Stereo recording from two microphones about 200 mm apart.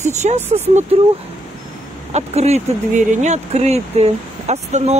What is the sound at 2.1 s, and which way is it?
Speech, 35° right (ahead or behind).